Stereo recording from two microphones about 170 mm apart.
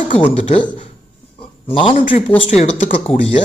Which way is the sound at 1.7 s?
30° left (ahead or behind).